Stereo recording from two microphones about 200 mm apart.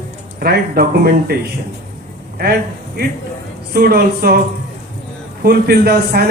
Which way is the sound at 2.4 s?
50° right (ahead or behind).